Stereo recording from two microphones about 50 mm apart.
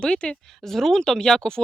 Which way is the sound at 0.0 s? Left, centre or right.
Centre.